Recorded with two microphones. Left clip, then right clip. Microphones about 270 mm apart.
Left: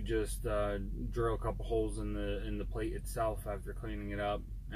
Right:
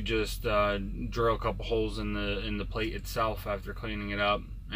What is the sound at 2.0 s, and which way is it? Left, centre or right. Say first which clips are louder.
Speech: right 6 dB; centre.